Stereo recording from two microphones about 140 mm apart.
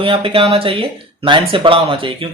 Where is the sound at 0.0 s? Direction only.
40° right (ahead or behind).